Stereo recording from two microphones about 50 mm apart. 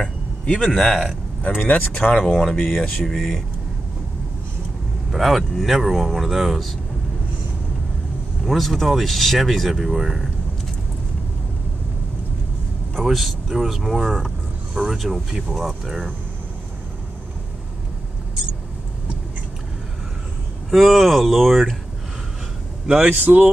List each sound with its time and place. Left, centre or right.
0.0 s a sound: centre
0.7 s speech: centre
1.6 s speech: left
2.3 s speech: centre
3.0 s speech: centre
5.1 s speech: centre
8.5 s speech: centre
13.0 s speech: centre
20.7 s speech: centre
23.0 s speech: right